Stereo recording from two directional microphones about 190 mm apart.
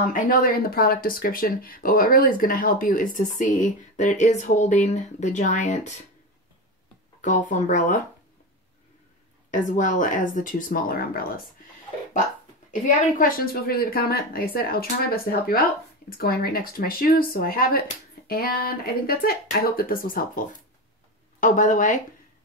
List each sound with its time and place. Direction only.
0.0 s speech: 45° left (ahead or behind)
7.2 s speech: 40° left (ahead or behind)
9.5 s speech: 45° left (ahead or behind)
12.8 s speech: 50° left (ahead or behind)